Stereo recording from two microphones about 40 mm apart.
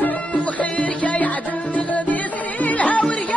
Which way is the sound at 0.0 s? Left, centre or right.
Left.